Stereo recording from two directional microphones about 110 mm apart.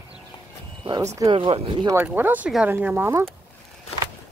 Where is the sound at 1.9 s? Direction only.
15° right (ahead or behind).